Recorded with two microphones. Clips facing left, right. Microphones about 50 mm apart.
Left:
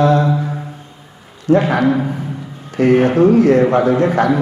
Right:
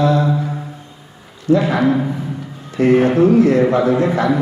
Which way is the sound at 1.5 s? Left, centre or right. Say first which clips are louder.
Left 1 dB; left.